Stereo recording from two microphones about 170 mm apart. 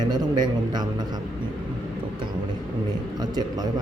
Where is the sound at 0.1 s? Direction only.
25° right (ahead or behind).